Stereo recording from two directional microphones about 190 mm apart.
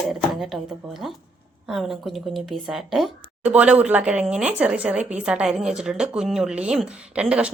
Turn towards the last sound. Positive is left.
turn(degrees=-5)  # may be behind; listen again after turning